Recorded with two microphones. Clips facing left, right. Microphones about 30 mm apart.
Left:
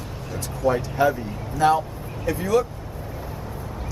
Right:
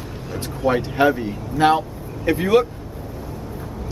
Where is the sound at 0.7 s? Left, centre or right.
Right.